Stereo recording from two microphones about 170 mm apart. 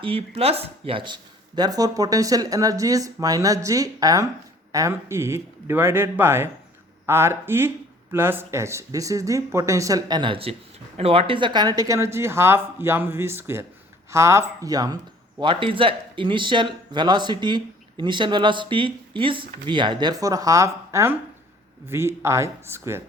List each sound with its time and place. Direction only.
0.0 s speech: 35° right (ahead or behind); by 23.0 s 15° right (ahead or behind)